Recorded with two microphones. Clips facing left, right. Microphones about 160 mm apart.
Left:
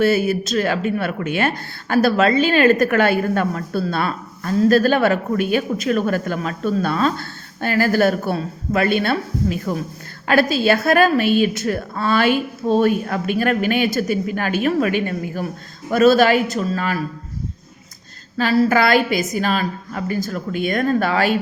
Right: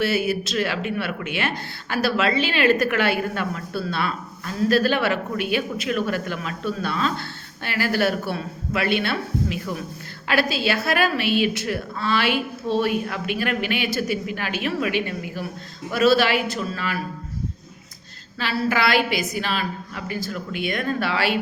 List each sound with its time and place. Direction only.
0.0 s speech: 45° left (ahead or behind)
18.3 s speech: 45° left (ahead or behind)